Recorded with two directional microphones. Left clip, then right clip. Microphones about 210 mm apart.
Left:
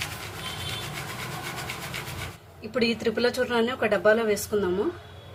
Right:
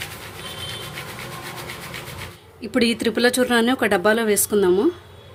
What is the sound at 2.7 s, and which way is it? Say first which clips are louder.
Speech: right 5 dB; 50° right (ahead or behind).